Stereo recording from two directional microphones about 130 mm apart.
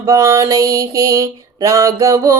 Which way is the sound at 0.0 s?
25° right (ahead or behind).